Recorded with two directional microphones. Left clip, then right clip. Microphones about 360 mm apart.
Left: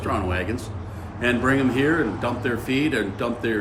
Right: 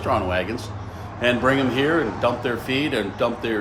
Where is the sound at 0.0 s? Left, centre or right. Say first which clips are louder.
Right 4 dB; centre.